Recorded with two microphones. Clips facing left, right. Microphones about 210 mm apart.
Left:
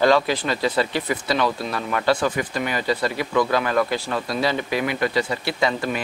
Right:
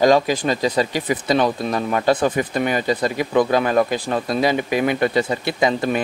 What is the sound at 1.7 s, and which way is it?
Speech, 30° right (ahead or behind).